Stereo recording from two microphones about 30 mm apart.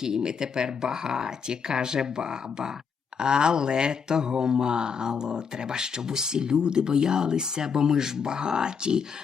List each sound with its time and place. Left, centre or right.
0.0 s speech: right